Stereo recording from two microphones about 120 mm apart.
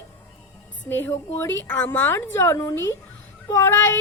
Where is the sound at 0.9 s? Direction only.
20° left (ahead or behind).